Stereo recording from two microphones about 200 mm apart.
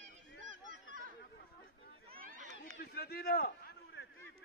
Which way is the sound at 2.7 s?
50° left (ahead or behind).